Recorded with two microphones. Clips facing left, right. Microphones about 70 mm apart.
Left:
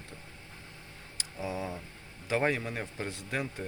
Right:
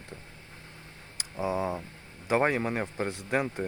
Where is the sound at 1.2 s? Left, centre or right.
Right.